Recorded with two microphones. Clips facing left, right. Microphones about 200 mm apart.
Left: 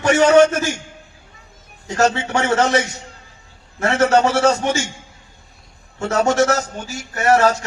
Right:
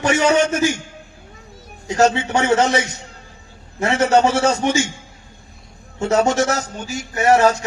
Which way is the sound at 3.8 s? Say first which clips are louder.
Even; 15° right (ahead or behind).